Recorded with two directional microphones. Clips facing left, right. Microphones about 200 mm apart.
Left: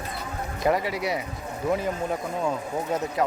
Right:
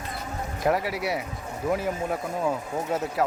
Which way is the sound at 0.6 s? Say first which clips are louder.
Left 1 dB; centre (ahead or behind).